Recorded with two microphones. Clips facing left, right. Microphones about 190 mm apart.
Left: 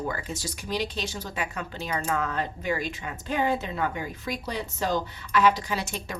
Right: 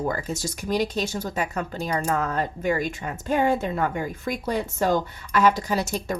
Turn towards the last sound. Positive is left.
turn(degrees=-40)  # may be behind; listen again after turning